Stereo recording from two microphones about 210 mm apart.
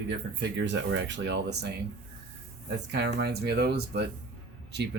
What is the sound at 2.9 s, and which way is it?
Speech, 50° right (ahead or behind).